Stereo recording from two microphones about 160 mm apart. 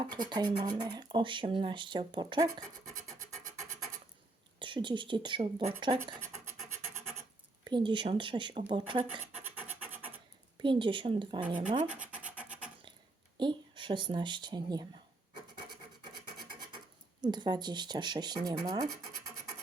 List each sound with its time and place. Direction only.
0.3 s speech: 25° right (ahead or behind)
4.6 s speech: 30° right (ahead or behind)
5.8 s speech: 25° right (ahead or behind)
7.6 s speech: 30° right (ahead or behind)
9.6 s rub: 10° right (ahead or behind)
10.6 s speech: 30° right (ahead or behind)
12.1 s scratch: 10° right (ahead or behind)
13.3 s speech: 30° right (ahead or behind)
17.2 s speech: 25° right (ahead or behind)